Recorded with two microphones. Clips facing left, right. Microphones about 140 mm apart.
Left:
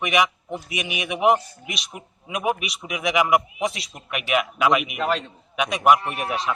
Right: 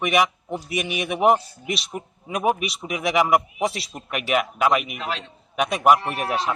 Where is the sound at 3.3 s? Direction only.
35° right (ahead or behind).